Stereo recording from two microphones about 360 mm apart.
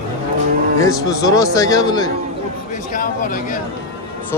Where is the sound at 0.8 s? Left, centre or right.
Centre.